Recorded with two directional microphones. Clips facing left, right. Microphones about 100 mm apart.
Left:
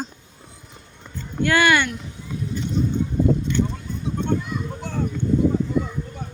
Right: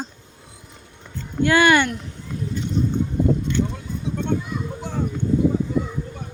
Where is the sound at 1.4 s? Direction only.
30° right (ahead or behind).